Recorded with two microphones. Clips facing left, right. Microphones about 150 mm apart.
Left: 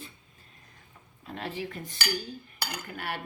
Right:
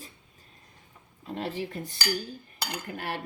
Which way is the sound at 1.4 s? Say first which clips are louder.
Right 3 dB; 35° right (ahead or behind).